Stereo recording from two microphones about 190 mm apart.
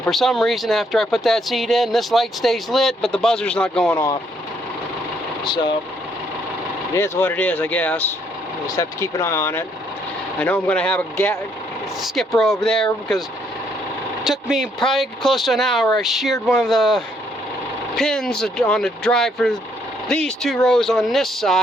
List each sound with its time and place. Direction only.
0.0 s speech: centre (ahead or behind)
3.8 s speech: 15° left (ahead or behind)
6.9 s speech: 10° left (ahead or behind)
14.3 s speech: centre (ahead or behind)